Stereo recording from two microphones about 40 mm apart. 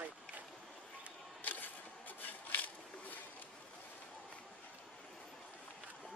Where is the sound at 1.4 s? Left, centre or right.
Left.